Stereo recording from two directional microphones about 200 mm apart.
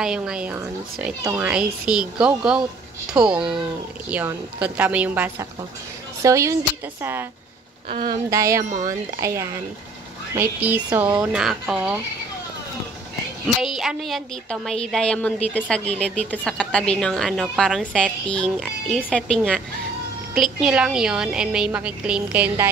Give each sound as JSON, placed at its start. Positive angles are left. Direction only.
{"t": 0.0, "sound": "a woman's voice", "side_deg": -5}
{"t": 13.7, "sound": "a woman's voice", "side_deg": 0}